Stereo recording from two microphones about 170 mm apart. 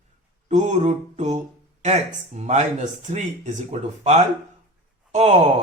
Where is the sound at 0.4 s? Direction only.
45° right (ahead or behind).